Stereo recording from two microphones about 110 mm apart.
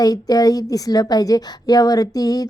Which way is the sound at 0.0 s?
35° left (ahead or behind).